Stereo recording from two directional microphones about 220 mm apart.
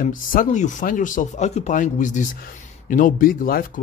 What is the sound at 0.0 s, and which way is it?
Speech, 40° left (ahead or behind).